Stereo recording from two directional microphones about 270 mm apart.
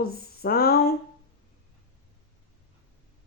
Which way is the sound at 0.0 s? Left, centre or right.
Left.